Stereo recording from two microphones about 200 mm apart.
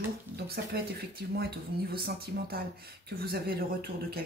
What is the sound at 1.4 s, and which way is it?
Speech, 50° right (ahead or behind).